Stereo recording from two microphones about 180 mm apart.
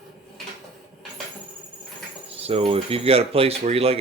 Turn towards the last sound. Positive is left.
turn(degrees=-35)  # may be behind; listen again after turning